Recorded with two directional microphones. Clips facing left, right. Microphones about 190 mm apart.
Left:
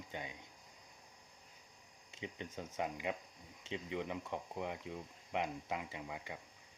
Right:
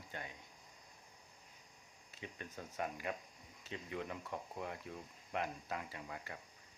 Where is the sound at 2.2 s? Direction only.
20° left (ahead or behind).